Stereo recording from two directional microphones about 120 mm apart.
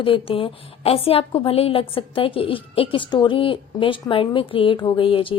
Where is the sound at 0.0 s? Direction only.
50° left (ahead or behind).